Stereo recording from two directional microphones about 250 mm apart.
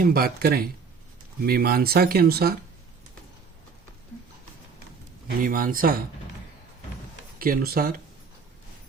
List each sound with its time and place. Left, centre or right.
0.0 s speech: right
5.4 s speech: right
7.3 s speech: right